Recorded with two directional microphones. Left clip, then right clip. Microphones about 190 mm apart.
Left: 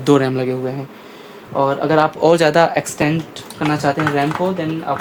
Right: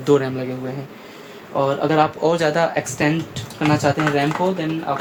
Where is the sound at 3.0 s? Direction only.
35° left (ahead or behind).